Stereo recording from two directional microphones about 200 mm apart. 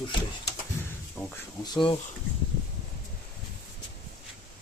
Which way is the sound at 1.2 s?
10° left (ahead or behind).